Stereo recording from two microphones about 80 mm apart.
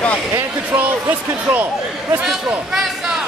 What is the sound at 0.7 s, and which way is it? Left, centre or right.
Speech, right.